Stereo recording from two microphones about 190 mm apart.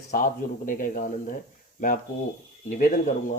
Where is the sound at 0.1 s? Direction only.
45° left (ahead or behind).